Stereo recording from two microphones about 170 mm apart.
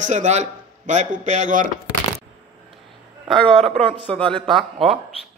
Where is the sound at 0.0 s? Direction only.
45° right (ahead or behind).